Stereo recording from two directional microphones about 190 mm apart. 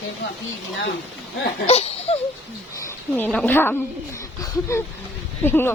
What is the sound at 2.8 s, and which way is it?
Speech, 10° left (ahead or behind).